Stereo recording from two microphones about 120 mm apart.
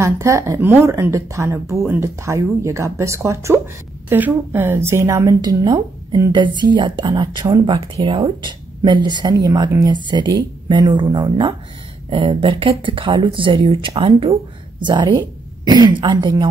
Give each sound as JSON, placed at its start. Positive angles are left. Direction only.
{"t": 0.0, "sound": "speech", "side_deg": -25}
{"t": 7.7, "sound": "speech", "side_deg": -55}
{"t": 8.5, "sound": "speech", "side_deg": -40}
{"t": 14.8, "sound": "a woman's voice", "side_deg": -40}